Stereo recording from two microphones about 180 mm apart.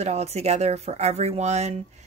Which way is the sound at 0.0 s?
35° right (ahead or behind).